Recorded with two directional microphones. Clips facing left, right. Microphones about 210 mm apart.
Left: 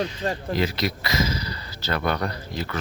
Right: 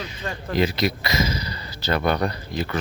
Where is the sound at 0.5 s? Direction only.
15° right (ahead or behind).